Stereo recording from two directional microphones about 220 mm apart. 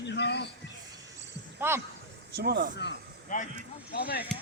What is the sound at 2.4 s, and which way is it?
Speech, 45° right (ahead or behind).